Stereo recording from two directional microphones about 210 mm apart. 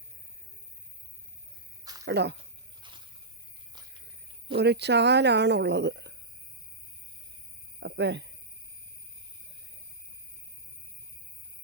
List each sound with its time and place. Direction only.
1.8 s cricket: 15° right (ahead or behind)
2.0 s speech: 55° right (ahead or behind)
2.8 s a sound: 20° right (ahead or behind)
4.5 s speech: 55° right (ahead or behind)
7.8 s speech: 55° right (ahead or behind)